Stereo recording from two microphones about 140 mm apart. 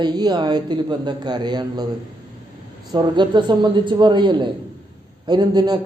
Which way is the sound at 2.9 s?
30° right (ahead or behind).